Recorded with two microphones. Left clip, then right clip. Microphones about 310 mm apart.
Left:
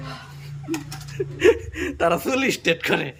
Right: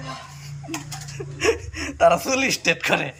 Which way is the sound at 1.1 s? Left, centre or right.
Centre.